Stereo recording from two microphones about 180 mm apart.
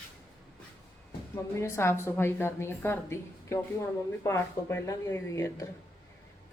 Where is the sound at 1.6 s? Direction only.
15° left (ahead or behind).